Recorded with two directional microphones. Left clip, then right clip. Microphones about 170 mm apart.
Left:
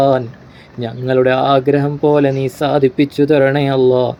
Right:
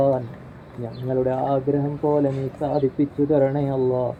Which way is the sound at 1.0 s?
85° left.